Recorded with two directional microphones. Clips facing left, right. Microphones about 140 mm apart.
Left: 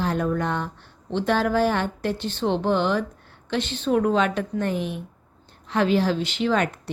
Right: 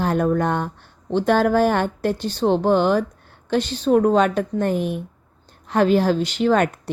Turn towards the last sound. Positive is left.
turn(degrees=-45)  # may be behind; listen again after turning